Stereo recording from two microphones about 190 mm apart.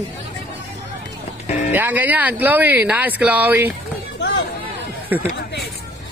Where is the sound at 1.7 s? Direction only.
10° right (ahead or behind).